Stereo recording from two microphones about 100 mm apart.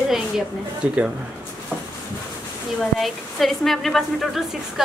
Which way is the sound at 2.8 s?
Centre (ahead or behind).